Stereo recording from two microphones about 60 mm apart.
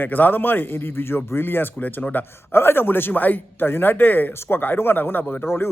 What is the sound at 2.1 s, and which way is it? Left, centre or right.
Speech, left.